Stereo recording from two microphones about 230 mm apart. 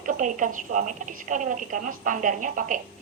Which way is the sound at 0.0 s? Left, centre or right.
Right.